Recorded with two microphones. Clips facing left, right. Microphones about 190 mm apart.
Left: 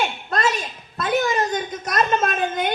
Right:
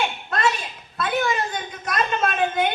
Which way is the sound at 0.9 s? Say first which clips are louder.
Left 3 dB; 40° left (ahead or behind).